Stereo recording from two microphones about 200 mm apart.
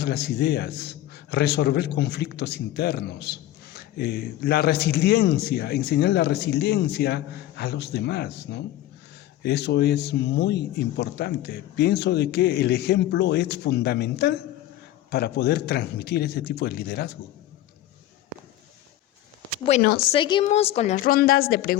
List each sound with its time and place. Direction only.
0.0 s a man's voice: 55° left (ahead or behind)
19.8 s a woman's voice: 50° left (ahead or behind)
20.1 s a woman's voice: 25° left (ahead or behind); by 21.8 s 50° left (ahead or behind)